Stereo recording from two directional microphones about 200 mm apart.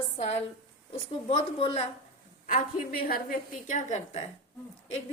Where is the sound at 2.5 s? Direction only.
45° left (ahead or behind).